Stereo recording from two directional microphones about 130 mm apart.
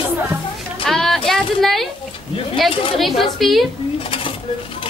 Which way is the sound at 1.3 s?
Centre (ahead or behind).